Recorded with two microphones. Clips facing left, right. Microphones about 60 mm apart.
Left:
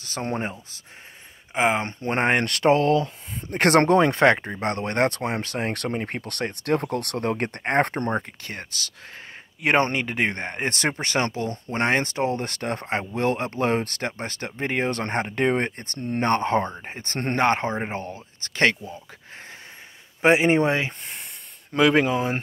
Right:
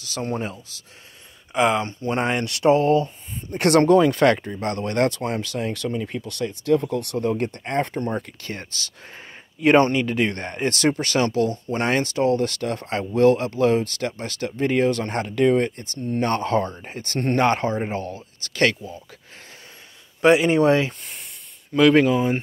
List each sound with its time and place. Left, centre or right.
0.0 s speech: left
1.5 s speech: left
1.9 s speech: left
3.5 s speech: left
3.9 s speech: left
9.8 s speech: left
10.3 s speech: centre
14.9 s speech: left
16.3 s speech: left
20.2 s speech: left
20.6 s speech: centre